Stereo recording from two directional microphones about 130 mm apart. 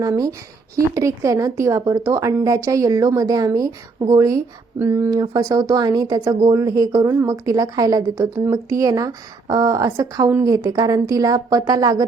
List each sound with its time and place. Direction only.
0.0 s speech: 25° right (ahead or behind)